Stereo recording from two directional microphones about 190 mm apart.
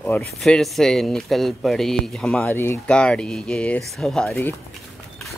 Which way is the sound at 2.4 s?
15° left (ahead or behind).